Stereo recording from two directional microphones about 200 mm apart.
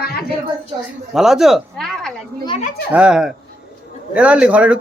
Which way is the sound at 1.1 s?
Centre (ahead or behind).